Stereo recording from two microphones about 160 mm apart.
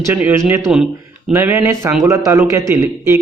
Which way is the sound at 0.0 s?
10° right (ahead or behind).